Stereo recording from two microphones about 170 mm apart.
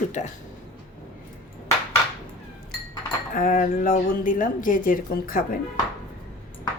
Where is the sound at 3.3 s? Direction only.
55° left (ahead or behind).